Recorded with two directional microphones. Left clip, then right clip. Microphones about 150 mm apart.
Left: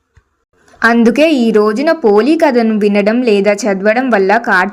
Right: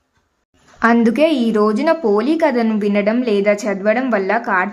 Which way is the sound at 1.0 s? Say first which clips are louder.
Left 5 dB; 25° left (ahead or behind).